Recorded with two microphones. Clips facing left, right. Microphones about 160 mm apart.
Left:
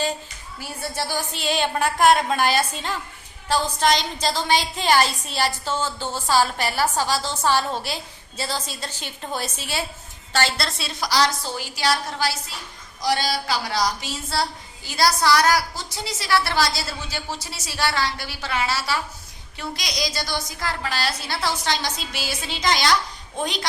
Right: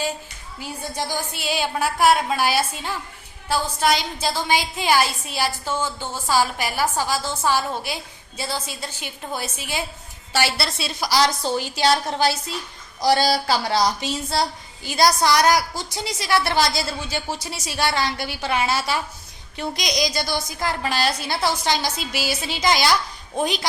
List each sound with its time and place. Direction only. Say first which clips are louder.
0.6 s a woman's voice: even; 15° right (ahead or behind)
11.5 s a woman's voice: right 4 dB; 25° right (ahead or behind)
13.0 s a woman's voice: right 5 dB; 35° right (ahead or behind); by 23.0 s 10° right (ahead or behind)